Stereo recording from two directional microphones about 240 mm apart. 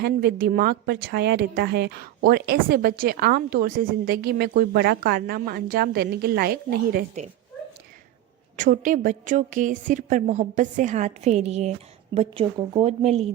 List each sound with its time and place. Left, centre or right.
0.0 s speech: right
8.5 s a woman's voice: right